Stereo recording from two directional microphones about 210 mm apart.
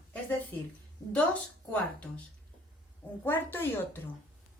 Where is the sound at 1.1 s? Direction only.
5° left (ahead or behind).